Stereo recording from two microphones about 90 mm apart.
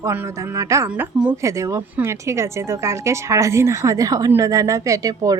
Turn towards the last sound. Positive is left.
turn(degrees=-40)  # may be behind; listen again after turning